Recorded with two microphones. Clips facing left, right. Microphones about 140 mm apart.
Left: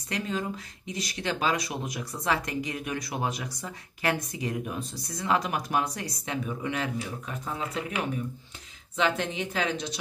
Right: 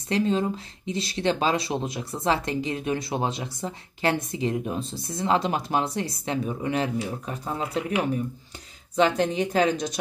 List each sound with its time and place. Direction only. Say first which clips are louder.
0.1 s speech: right 8 dB; 30° right (ahead or behind)
8.9 s speech: right 6 dB; 35° right (ahead or behind)